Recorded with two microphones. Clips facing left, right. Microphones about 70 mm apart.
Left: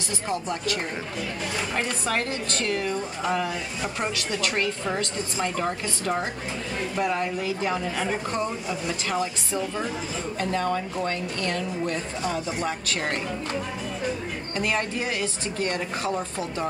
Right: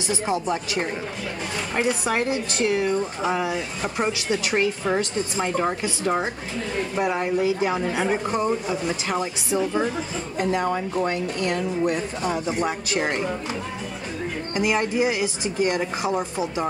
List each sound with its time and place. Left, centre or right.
0.1 s speech: centre
14.5 s speech: centre